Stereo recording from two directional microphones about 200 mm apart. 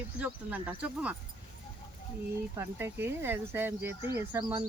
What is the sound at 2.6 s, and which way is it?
Speech, 10° right (ahead or behind).